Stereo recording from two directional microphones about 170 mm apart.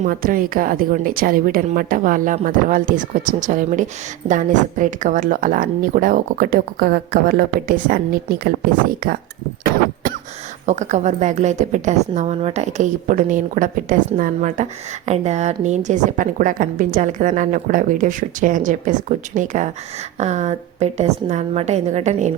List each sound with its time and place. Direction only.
0.0 s a woman's voice: 55° right (ahead or behind)
10.7 s a woman's voice: 45° right (ahead or behind)